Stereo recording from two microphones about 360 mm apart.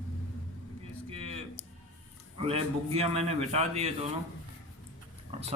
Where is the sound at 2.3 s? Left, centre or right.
Centre.